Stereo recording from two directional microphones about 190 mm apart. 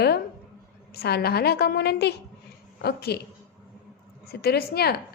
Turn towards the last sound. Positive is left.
turn(degrees=55)  # may be behind; listen again after turning